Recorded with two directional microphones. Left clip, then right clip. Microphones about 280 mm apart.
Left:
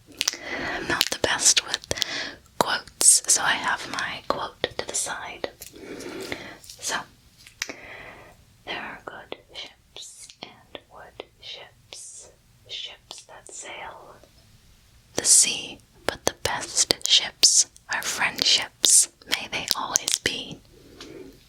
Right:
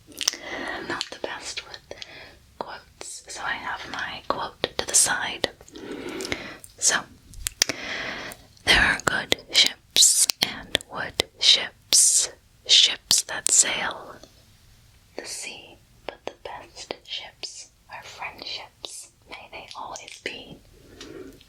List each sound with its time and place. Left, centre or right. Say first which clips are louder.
0.3 s whispering: right 2 dB; centre
0.9 s whispering: left 8 dB; left; by 13.9 s right
15.1 s whispering: left 14 dB; left